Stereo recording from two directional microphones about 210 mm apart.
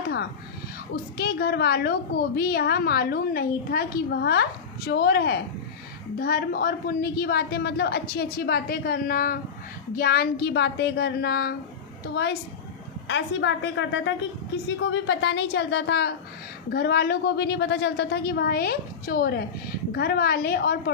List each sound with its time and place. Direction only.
1.1 s a woman's voice: 50° left (ahead or behind)